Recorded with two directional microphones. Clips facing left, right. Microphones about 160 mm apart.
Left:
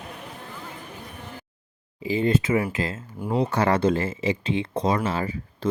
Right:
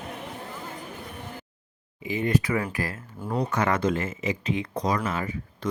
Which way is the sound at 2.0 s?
30° left (ahead or behind).